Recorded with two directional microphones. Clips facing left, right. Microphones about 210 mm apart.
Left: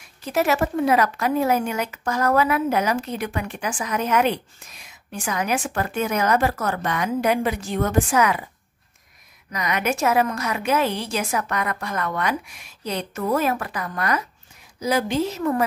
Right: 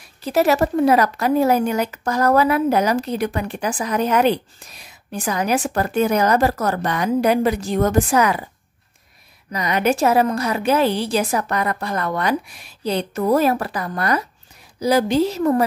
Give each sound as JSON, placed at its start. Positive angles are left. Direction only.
{"t": 0.2, "sound": "speech", "side_deg": -35}
{"t": 9.5, "sound": "speech", "side_deg": -30}